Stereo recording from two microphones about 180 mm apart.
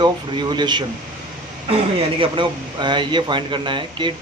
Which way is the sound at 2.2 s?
25° right (ahead or behind).